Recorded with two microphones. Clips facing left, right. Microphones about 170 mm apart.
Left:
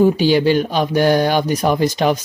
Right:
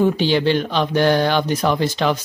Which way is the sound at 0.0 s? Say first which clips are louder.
Left 3 dB; 10° left (ahead or behind).